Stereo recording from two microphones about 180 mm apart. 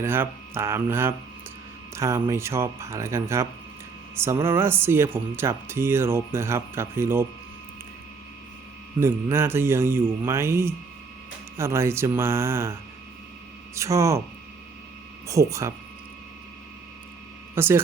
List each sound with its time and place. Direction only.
0.0 s speech: 15° right (ahead or behind)
9.0 s speech: 15° right (ahead or behind)
13.7 s speech: 15° right (ahead or behind)
15.3 s speech: 15° right (ahead or behind)
17.5 s speech: 15° right (ahead or behind)